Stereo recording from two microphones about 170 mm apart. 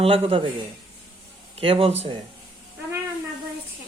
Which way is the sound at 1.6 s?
35° right (ahead or behind).